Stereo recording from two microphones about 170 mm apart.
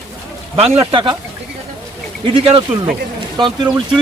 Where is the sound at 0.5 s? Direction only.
35° right (ahead or behind).